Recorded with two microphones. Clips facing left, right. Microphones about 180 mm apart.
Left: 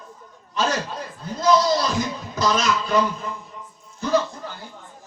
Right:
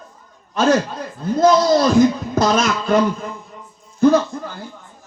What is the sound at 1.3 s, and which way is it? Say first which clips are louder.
A man's voice: right 5 dB; 50° right (ahead or behind).